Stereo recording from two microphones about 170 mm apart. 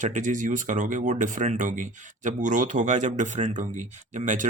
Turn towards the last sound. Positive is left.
turn(degrees=-50)  # may be behind; listen again after turning